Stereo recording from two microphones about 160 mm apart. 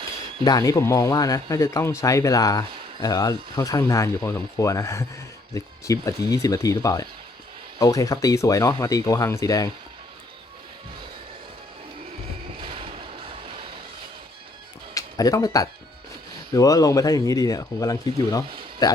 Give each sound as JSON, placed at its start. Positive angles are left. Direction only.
{"t": 0.4, "sound": "a man's voice", "side_deg": 25}
{"t": 12.5, "sound": "a sound", "side_deg": -35}
{"t": 14.9, "sound": "a man's voice", "side_deg": 20}